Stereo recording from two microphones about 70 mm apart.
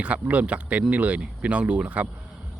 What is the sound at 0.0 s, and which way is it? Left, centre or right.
Speech, centre.